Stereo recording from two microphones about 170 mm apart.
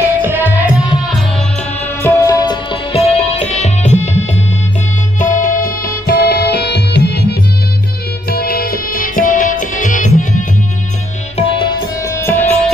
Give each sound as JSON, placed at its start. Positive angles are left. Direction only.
{"t": 0.0, "sound": "music", "side_deg": -10}
{"t": 2.0, "sound": "music", "side_deg": 20}
{"t": 5.2, "sound": "music", "side_deg": 50}
{"t": 8.3, "sound": "music", "side_deg": 65}
{"t": 11.3, "sound": "music", "side_deg": 30}
{"t": 12.0, "sound": "music", "side_deg": 15}